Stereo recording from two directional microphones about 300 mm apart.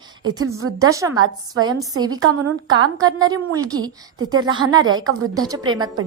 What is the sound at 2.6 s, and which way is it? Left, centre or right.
A woman's voice, centre.